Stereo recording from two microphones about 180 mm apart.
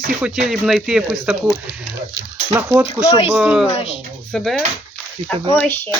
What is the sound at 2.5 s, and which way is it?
Speech, 15° right (ahead or behind).